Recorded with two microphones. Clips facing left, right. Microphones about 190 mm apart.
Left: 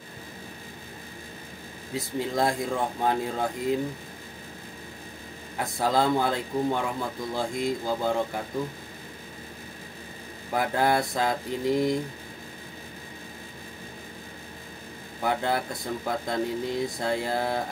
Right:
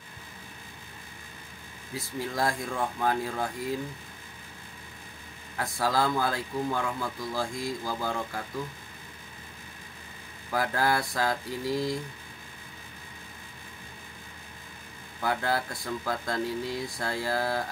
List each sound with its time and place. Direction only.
2.0 s speech: 20° left (ahead or behind)
5.6 s speech: 20° left (ahead or behind)
10.5 s speech: 20° left (ahead or behind)
15.1 s speech: 20° left (ahead or behind)